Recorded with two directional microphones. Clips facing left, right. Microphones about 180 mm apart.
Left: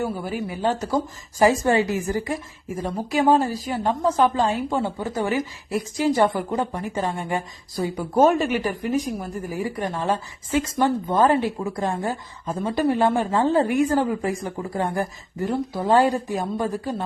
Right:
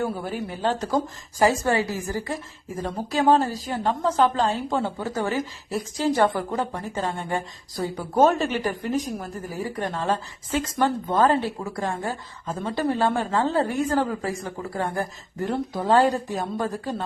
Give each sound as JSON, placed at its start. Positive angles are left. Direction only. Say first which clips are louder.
{"t": 0.4, "sound": "a woman's voice", "louder": "left 2 dB", "side_deg": 10}